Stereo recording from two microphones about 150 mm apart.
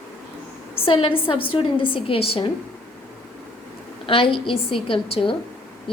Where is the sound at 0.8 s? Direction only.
40° left (ahead or behind).